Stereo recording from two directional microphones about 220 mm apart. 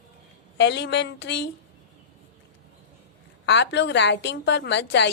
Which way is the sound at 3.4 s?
50° left (ahead or behind).